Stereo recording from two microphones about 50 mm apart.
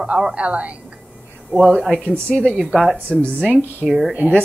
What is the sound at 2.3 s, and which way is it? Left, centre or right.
A woman's voice, centre.